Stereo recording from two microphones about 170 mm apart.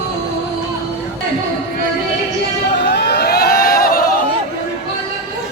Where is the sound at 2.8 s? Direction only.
80° left; by 4.0 s 60° left (ahead or behind).